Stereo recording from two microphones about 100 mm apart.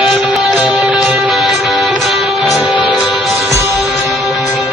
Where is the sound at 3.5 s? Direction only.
25° right (ahead or behind).